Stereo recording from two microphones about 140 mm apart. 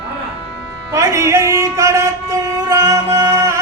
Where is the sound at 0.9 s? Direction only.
20° right (ahead or behind).